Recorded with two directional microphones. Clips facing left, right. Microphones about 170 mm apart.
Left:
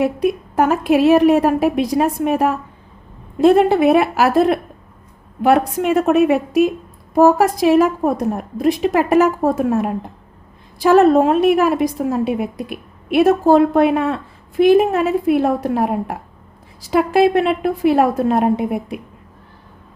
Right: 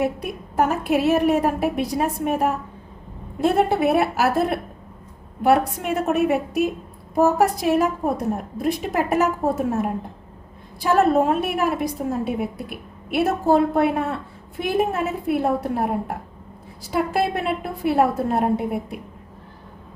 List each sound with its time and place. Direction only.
0.0 s a woman's voice: 90° left